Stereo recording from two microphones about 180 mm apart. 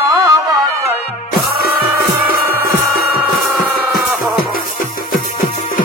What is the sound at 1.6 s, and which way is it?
Music, 55° left (ahead or behind).